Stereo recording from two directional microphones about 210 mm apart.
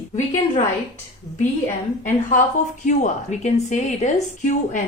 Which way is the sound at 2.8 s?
35° left (ahead or behind).